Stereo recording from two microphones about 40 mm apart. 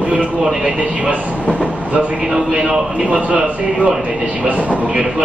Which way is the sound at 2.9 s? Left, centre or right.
Right.